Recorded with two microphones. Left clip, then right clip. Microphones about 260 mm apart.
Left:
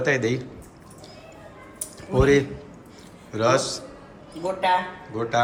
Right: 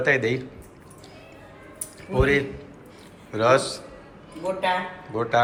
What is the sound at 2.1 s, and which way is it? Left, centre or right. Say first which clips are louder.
A man's voice: left 2 dB; centre.